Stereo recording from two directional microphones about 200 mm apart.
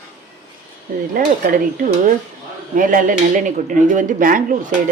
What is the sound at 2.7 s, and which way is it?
Speech, 40° right (ahead or behind).